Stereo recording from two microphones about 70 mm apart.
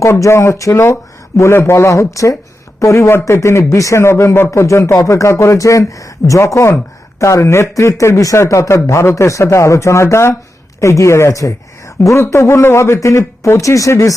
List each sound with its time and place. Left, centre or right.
0.0 s speech: left